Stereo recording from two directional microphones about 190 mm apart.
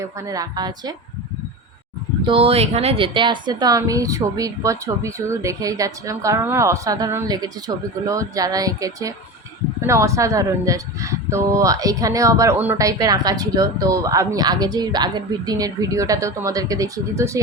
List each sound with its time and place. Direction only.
0.0 s a woman's voice: 20° right (ahead or behind)
2.2 s speech: 30° right (ahead or behind)